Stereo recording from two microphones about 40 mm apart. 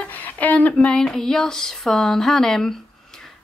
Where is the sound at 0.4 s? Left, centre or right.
Left.